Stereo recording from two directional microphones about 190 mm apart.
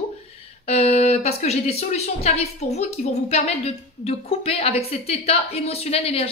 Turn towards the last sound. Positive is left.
turn(degrees=30)  # may be behind; listen again after turning